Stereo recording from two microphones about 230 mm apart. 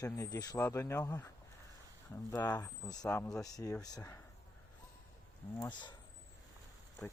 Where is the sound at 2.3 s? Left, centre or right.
Centre.